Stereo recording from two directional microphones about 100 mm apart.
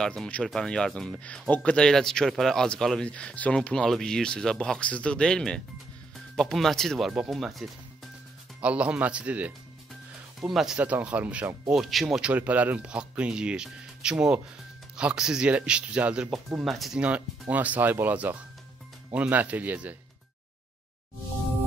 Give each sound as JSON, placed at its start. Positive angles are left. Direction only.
{"t": 0.0, "sound": "speech", "side_deg": 5}
{"t": 8.6, "sound": "speech", "side_deg": -10}
{"t": 10.8, "sound": "speech", "side_deg": -15}
{"t": 11.7, "sound": "speech", "side_deg": 0}
{"t": 16.3, "sound": "speech", "side_deg": 0}
{"t": 17.0, "sound": "speech", "side_deg": -15}